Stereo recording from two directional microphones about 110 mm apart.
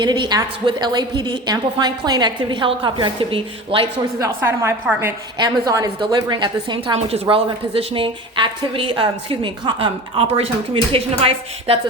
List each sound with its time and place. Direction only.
0.0 s a woman's voice: 40° right (ahead or behind)
4.4 s a woman's voice: 15° right (ahead or behind)
5.4 s a woman's voice: 35° right (ahead or behind)
7.1 s a woman's voice: 55° right (ahead or behind)